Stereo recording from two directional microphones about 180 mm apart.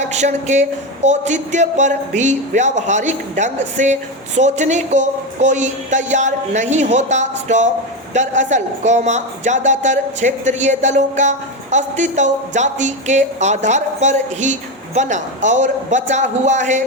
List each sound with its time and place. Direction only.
0.1 s a man's voice: 40° right (ahead or behind)